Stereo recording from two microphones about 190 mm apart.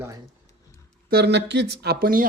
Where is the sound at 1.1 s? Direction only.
60° right (ahead or behind).